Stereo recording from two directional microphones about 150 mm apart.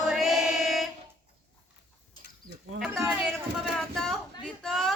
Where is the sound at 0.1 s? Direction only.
5° right (ahead or behind).